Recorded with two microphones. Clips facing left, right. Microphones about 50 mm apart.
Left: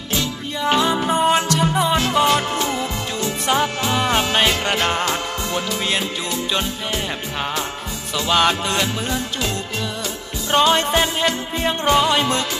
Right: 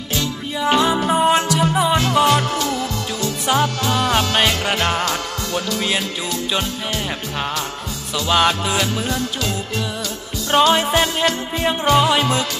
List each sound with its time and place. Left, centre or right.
0.6 s music: centre
2.6 s music: left
4.4 s music: centre
5.0 s music: centre
8.3 s music: centre
10.5 s music: centre